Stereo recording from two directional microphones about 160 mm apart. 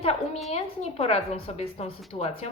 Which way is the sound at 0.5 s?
40° left (ahead or behind).